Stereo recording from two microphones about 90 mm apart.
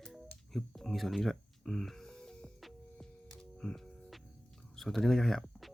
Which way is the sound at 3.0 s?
5° left (ahead or behind).